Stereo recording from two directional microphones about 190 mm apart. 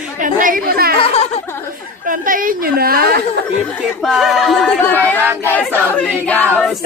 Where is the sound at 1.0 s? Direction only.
35° left (ahead or behind).